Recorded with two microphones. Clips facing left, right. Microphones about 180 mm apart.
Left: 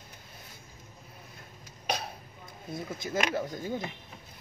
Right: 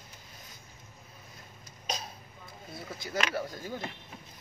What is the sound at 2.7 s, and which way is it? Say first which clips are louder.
Speech: left 3 dB; 20° left (ahead or behind).